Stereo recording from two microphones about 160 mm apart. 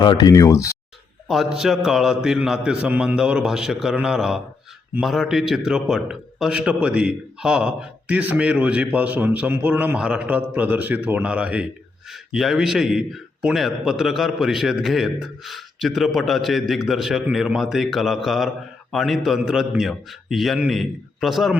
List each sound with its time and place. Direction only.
0.0 s speech: 25° left (ahead or behind)
1.3 s a man's voice: 5° right (ahead or behind)